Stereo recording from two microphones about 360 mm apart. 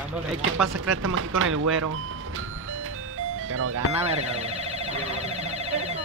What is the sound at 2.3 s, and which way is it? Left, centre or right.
Music, right.